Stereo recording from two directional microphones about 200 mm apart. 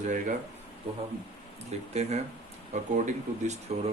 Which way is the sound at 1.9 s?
35° right (ahead or behind).